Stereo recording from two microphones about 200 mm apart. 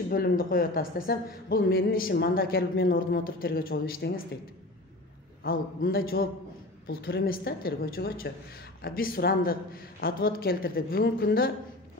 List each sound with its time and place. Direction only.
0.1 s speech: 45° left (ahead or behind)
5.4 s speech: 45° left (ahead or behind)